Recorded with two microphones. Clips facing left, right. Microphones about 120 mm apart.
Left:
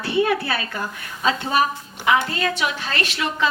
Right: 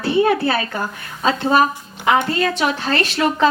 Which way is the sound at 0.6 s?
45° right (ahead or behind).